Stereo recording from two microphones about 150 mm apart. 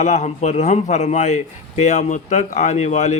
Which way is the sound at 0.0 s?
50° left (ahead or behind).